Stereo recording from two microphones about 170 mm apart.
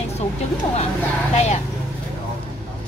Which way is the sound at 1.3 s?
40° left (ahead or behind).